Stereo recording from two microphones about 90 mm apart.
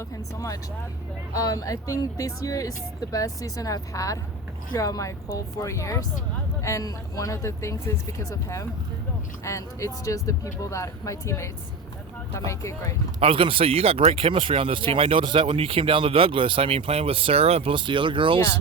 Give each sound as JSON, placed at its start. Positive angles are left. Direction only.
{"t": 0.3, "sound": "speech", "side_deg": 40}
{"t": 9.4, "sound": "speech", "side_deg": 35}
{"t": 12.5, "sound": "speech", "side_deg": 35}
{"t": 13.1, "sound": "speech", "side_deg": -85}